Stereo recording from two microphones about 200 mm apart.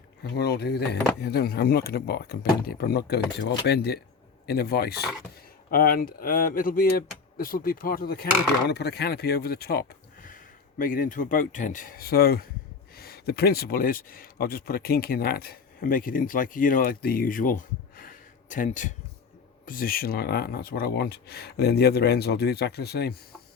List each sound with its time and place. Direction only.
0.3 s speech: 55° left (ahead or behind)